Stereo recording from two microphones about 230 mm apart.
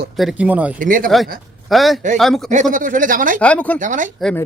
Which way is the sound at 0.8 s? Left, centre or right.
Right.